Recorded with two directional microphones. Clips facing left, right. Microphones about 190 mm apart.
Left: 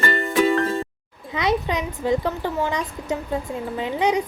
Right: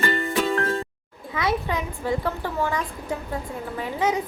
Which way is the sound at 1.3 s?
20° left (ahead or behind).